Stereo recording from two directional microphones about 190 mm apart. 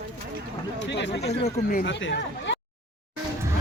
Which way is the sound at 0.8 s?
65° left (ahead or behind).